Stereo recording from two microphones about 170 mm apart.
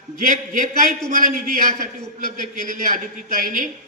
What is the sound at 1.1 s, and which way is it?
A man's voice, 55° right (ahead or behind).